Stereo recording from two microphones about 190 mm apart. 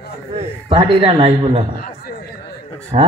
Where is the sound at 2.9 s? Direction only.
35° right (ahead or behind).